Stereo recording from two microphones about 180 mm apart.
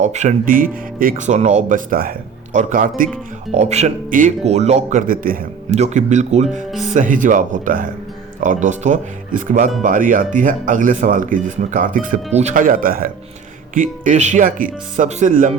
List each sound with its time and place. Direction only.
0.0 s speech: 40° right (ahead or behind)
3.5 s speech: 40° right (ahead or behind)
5.7 s speech: 40° right (ahead or behind)